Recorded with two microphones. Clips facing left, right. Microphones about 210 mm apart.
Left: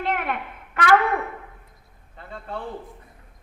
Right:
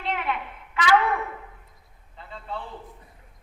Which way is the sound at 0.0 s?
55° left (ahead or behind).